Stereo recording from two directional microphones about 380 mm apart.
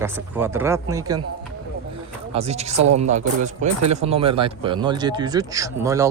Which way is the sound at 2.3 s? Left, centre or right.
Centre.